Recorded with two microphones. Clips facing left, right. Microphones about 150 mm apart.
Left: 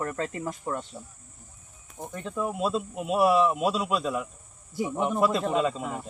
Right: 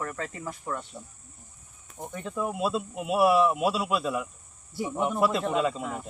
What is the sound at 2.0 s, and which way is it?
Speech, 5° right (ahead or behind).